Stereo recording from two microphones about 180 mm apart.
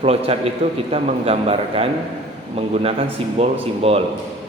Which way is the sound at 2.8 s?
30° right (ahead or behind).